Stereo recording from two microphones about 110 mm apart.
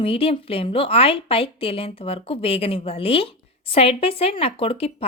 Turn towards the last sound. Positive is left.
turn(degrees=60)  # may be behind; listen again after turning